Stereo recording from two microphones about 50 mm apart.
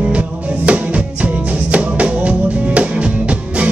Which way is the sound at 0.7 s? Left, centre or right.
Right.